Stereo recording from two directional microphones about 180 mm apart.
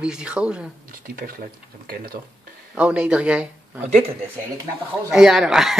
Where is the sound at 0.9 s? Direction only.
50° right (ahead or behind).